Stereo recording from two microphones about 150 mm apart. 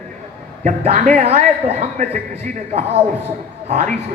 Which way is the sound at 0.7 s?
50° right (ahead or behind).